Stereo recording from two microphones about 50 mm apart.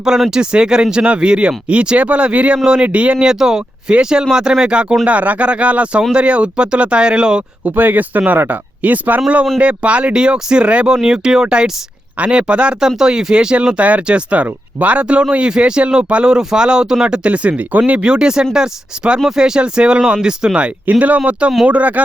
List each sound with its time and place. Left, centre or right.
0.0 s speech: centre; by 3.2 s right
3.2 s speech: centre
7.6 s speech: right
18.1 s speech: centre; by 22.0 s right